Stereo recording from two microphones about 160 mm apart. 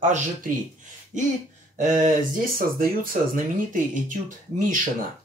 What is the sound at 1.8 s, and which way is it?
Speech, 50° right (ahead or behind).